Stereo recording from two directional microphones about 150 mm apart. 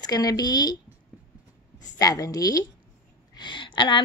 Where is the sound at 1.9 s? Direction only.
25° left (ahead or behind).